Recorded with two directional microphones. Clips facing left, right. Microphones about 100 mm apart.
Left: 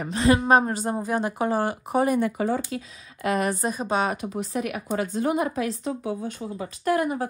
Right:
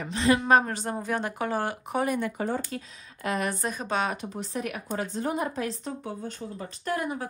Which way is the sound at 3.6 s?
10° left (ahead or behind).